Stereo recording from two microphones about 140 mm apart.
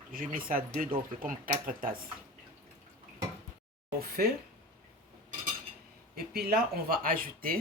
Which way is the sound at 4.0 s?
90° right.